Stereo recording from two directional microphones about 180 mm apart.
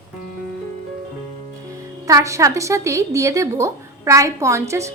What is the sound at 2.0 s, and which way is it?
A woman's voice, 15° right (ahead or behind).